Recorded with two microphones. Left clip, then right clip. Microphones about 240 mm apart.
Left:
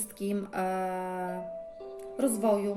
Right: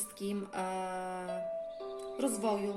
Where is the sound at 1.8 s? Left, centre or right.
Right.